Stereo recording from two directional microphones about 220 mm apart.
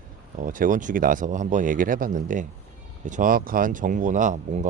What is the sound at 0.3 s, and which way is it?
Speech, 35° right (ahead or behind).